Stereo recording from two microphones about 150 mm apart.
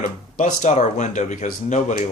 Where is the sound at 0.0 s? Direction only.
60° left (ahead or behind).